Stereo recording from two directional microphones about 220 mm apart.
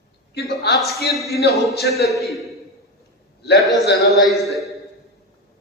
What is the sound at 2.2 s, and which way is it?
Speech, centre (ahead or behind).